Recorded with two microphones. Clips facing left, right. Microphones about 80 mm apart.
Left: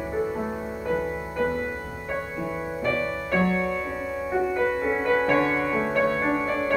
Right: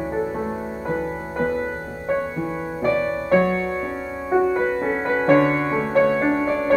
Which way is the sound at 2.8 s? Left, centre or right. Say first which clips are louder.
Right 6 dB; right.